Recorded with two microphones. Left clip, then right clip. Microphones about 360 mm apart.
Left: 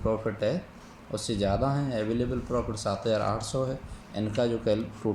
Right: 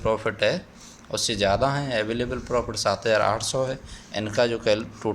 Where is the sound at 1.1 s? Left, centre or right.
Right.